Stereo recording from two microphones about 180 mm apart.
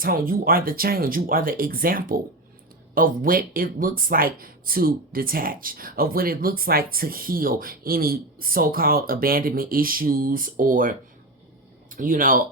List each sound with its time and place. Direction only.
0.0 s speech: 50° right (ahead or behind)